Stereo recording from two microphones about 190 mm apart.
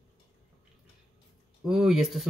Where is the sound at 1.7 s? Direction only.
5° right (ahead or behind).